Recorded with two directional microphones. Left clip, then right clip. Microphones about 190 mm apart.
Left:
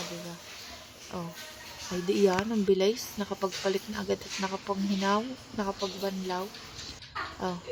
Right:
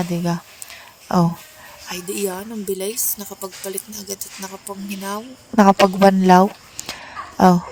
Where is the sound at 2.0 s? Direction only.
Centre (ahead or behind).